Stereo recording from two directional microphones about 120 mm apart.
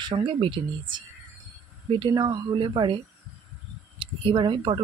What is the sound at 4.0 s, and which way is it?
Speech, 45° right (ahead or behind).